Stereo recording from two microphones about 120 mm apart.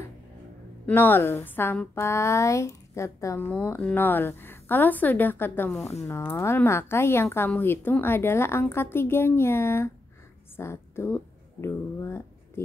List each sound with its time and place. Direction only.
0.8 s speech: 15° left (ahead or behind)
3.4 s a woman's voice: 15° left (ahead or behind)
10.5 s a sound: 20° left (ahead or behind)